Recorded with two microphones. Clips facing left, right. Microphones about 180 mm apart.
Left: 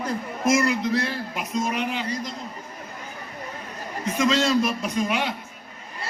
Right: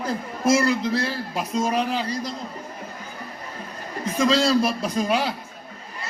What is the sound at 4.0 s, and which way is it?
A man's voice, 35° right (ahead or behind).